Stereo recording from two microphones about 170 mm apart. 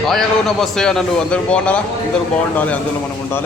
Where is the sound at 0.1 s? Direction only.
Centre (ahead or behind).